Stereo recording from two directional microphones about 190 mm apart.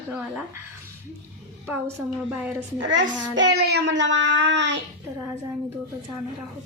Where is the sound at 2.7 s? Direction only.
75° right (ahead or behind).